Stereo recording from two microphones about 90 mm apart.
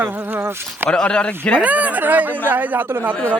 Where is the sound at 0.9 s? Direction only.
10° left (ahead or behind).